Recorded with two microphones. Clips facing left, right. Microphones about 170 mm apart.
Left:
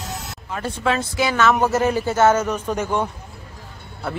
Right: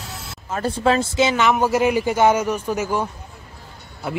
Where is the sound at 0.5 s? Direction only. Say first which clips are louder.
Right 4 dB; 35° right (ahead or behind); by 3.0 s 5° right (ahead or behind).